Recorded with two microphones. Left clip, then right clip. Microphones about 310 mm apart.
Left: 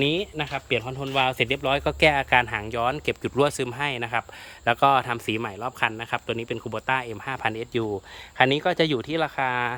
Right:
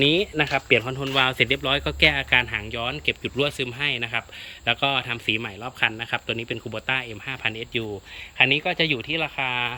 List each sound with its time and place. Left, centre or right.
0.0 s speech: centre
9.4 s speech: left